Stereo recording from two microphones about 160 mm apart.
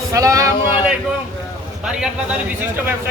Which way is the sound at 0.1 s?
20° right (ahead or behind).